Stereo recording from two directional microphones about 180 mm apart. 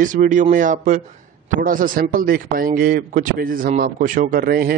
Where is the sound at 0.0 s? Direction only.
45° right (ahead or behind).